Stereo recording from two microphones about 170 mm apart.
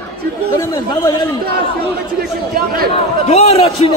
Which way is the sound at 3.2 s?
35° left (ahead or behind).